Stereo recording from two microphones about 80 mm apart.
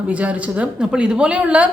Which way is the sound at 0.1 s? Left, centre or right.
Centre.